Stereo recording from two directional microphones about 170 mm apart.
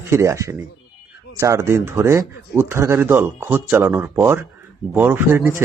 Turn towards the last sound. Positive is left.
turn(degrees=-15)  # may be behind; listen again after turning